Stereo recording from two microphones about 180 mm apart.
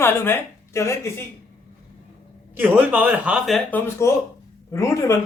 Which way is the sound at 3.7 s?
10° left (ahead or behind).